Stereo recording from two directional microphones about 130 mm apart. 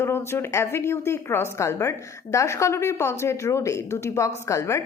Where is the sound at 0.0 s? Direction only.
20° left (ahead or behind).